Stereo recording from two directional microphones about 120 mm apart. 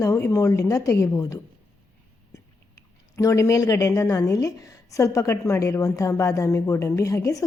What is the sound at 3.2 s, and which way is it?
Speech, 25° left (ahead or behind).